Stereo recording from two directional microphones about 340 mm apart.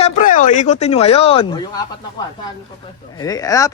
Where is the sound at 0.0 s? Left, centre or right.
Left.